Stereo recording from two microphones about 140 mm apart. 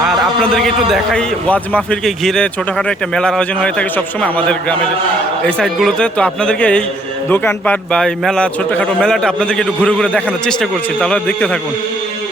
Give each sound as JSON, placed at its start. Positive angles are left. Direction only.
{"t": 0.1, "sound": "a man's voice", "side_deg": 0}
{"t": 1.5, "sound": "speech", "side_deg": 10}